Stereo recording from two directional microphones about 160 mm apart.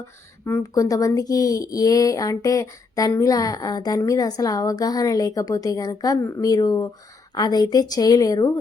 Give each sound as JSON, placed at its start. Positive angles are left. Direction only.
{"t": 0.4, "sound": "speech", "side_deg": 20}